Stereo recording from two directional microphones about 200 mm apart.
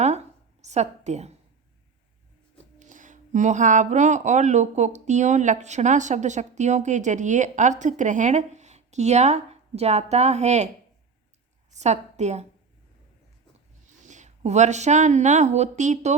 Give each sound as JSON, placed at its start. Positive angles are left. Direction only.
{"t": 0.0, "sound": "a sound", "side_deg": -35}
{"t": 2.7, "sound": "speech", "side_deg": -40}
{"t": 11.7, "sound": "a woman's voice", "side_deg": -35}
{"t": 14.0, "sound": "speech", "side_deg": -35}